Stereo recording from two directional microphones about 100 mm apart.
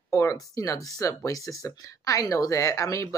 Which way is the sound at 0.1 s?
30° left (ahead or behind).